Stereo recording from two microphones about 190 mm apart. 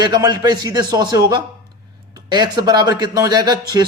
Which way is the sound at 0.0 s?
20° right (ahead or behind).